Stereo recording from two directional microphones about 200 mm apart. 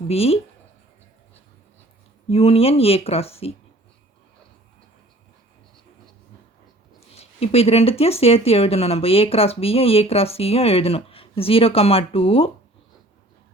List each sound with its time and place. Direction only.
0.1 s speech: 30° left (ahead or behind)
2.3 s speech: 30° left (ahead or behind)
7.2 s speech: 30° left (ahead or behind)